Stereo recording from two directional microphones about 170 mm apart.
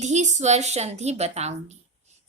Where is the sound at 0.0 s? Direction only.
45° right (ahead or behind).